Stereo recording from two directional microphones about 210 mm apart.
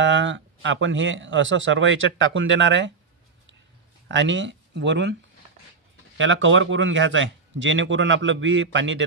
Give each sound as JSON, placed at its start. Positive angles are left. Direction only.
{"t": 0.0, "sound": "speech", "side_deg": -60}
{"t": 4.1, "sound": "speech", "side_deg": -60}
{"t": 6.1, "sound": "speech", "side_deg": -65}